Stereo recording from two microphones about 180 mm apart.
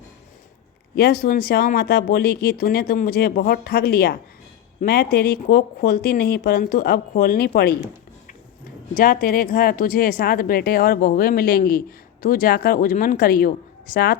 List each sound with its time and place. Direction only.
0.9 s speech: 60° left (ahead or behind)
9.0 s a woman's voice: 50° left (ahead or behind)